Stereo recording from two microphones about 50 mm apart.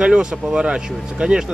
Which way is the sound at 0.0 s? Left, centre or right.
Centre.